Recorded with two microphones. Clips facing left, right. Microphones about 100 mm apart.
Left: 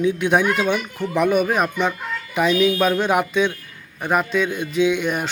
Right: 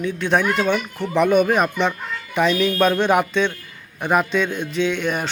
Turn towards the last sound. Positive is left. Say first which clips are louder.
# left 2 dB
turn(degrees=10)  # may be behind; listen again after turning